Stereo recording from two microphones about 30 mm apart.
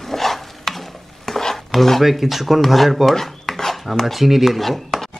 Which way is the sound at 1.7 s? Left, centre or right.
Centre.